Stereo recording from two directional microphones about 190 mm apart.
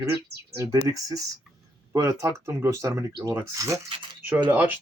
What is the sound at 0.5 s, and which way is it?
Speech, 15° right (ahead or behind).